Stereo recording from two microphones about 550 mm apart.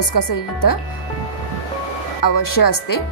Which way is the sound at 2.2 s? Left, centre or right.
Left.